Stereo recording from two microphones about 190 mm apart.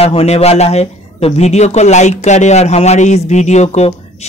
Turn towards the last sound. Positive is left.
turn(degrees=35)  # may be behind; listen again after turning